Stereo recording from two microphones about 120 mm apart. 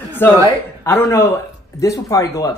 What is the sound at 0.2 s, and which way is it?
Speech, 20° left (ahead or behind).